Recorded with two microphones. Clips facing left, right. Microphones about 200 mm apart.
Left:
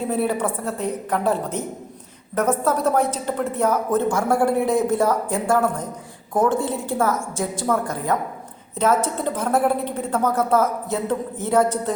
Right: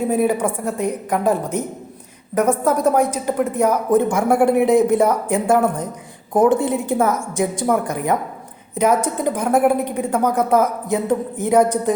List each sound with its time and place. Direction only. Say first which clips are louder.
0.1 s a woman's voice: right 2 dB; 10° right (ahead or behind)